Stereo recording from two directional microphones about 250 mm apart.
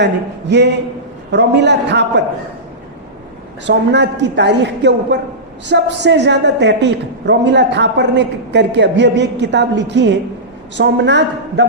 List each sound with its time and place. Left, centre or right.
0.0 s a woman's voice: right
3.7 s a woman's voice: right